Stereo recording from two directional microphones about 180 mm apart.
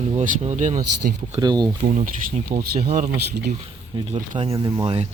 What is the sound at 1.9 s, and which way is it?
Speech, 45° right (ahead or behind).